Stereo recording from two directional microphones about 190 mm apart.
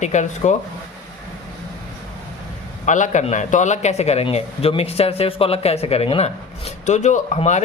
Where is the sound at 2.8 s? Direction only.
40° left (ahead or behind).